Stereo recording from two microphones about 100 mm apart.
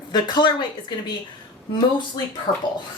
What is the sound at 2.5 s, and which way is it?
Speech, 70° left (ahead or behind).